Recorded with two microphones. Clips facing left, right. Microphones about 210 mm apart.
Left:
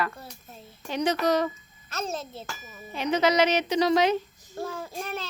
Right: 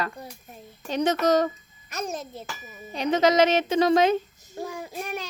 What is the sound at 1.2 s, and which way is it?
Speech, 45° right (ahead or behind).